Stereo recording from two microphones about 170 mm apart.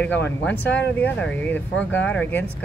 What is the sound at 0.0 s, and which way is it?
Speech, 10° left (ahead or behind).